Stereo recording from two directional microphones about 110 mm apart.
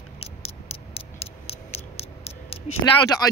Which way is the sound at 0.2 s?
65° left (ahead or behind).